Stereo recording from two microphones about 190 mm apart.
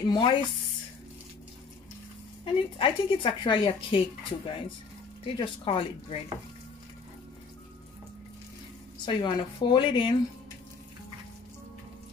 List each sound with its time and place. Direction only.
0.0 s a woman's voice: 25° left (ahead or behind)
2.4 s a woman's voice: 25° left (ahead or behind)
9.0 s a woman's voice: 25° left (ahead or behind)